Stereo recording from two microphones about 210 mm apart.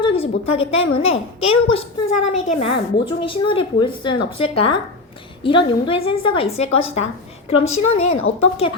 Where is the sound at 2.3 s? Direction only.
30° left (ahead or behind).